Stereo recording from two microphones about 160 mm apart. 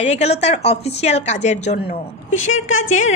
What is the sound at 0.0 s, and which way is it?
A woman's voice, 40° left (ahead or behind).